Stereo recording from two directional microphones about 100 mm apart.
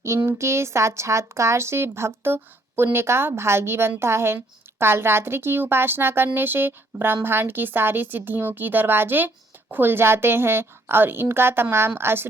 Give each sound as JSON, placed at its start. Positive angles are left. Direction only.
{"t": 0.0, "sound": "speech", "side_deg": -25}